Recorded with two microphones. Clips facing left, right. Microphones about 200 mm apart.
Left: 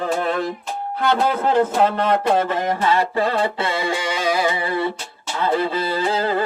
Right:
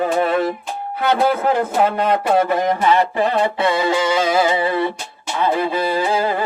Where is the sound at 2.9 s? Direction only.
20° right (ahead or behind).